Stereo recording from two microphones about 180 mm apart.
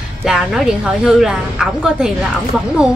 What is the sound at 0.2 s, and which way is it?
A woman's voice, 5° right (ahead or behind).